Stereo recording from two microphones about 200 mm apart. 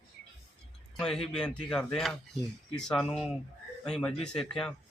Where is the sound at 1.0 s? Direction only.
5° left (ahead or behind).